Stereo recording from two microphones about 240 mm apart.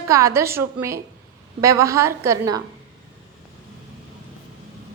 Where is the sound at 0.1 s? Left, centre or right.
Centre.